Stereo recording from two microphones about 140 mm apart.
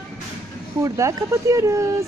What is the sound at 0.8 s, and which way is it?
Speech, 25° right (ahead or behind).